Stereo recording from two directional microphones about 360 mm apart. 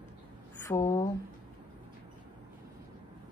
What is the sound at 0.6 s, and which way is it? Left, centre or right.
Speech, centre.